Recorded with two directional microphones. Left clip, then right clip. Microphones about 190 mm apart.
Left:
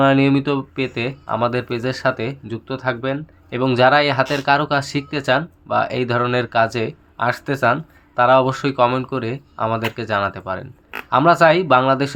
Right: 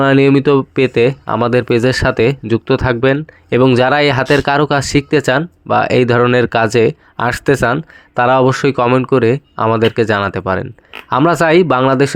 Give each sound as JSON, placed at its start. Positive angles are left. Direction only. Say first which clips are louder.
{"t": 0.0, "sound": "speech", "louder": "right 5 dB", "side_deg": -40}